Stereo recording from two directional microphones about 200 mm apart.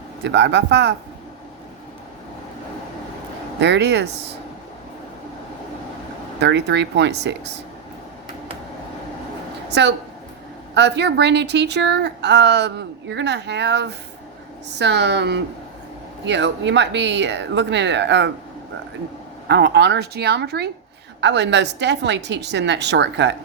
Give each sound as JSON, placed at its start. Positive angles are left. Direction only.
{"t": 0.3, "sound": "a woman's voice", "side_deg": -60}
{"t": 3.6, "sound": "a woman's voice", "side_deg": -60}
{"t": 6.4, "sound": "a woman's voice", "side_deg": -60}
{"t": 9.7, "sound": "a woman's voice", "side_deg": -60}
{"t": 19.5, "sound": "a woman's voice", "side_deg": -60}